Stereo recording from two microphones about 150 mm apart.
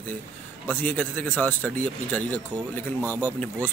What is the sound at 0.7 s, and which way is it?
Speech, 10° left (ahead or behind).